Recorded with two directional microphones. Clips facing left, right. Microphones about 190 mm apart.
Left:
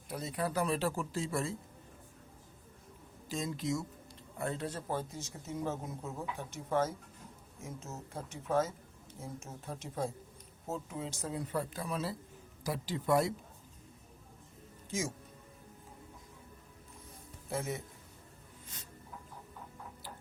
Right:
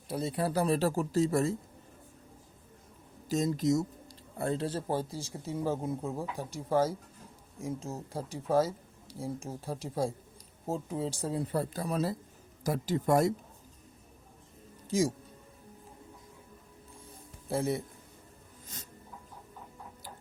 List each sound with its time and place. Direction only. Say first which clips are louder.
0.1 s speech: right 5 dB; 30° right (ahead or behind)
3.2 s speech: right 8 dB; 40° right (ahead or behind)
4.4 s speech: right 5 dB; 30° right (ahead or behind)
14.8 s speech: right 9 dB; 35° right (ahead or behind)
17.5 s speech: right 7 dB; 35° right (ahead or behind)
18.7 s snake: right 6 dB; 40° right (ahead or behind)